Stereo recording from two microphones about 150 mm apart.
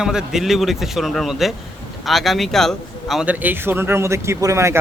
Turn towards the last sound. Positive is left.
turn(degrees=-20)  # may be behind; listen again after turning